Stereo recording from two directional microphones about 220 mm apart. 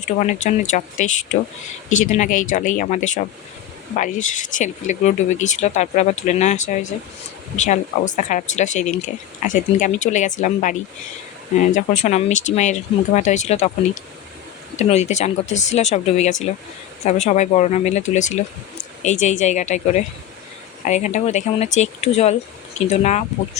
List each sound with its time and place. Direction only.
0.0 s speech: 35° left (ahead or behind)
14.8 s speech: 30° left (ahead or behind)